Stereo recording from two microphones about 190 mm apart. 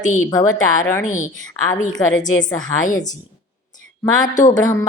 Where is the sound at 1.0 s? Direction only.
40° left (ahead or behind).